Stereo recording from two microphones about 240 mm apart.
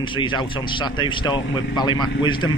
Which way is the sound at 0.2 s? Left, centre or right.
Centre.